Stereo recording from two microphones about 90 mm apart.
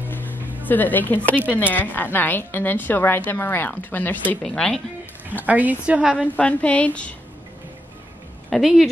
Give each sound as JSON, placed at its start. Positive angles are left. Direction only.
{"t": 0.1, "sound": "music", "side_deg": 20}
{"t": 0.6, "sound": "a woman's voice", "side_deg": 20}
{"t": 4.4, "sound": "a woman's voice", "side_deg": 10}
{"t": 5.4, "sound": "a woman's voice", "side_deg": -20}
{"t": 6.2, "sound": "a woman's voice", "side_deg": 15}
{"t": 8.5, "sound": "speech", "side_deg": 0}